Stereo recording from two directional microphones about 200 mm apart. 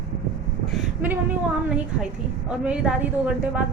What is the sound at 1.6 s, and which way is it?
A woman's voice, 5° right (ahead or behind).